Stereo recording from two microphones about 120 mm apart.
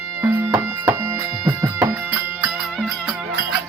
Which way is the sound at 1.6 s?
20° right (ahead or behind).